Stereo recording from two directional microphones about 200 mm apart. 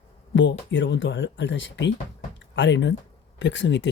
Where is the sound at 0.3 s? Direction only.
65° left (ahead or behind).